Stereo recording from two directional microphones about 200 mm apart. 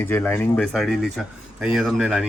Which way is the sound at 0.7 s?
Centre (ahead or behind).